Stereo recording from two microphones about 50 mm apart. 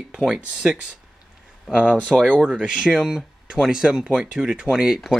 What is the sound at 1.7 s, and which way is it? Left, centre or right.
Speech, centre.